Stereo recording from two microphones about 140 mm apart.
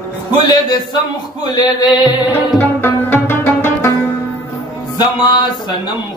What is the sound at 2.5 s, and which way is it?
Music, 15° left (ahead or behind).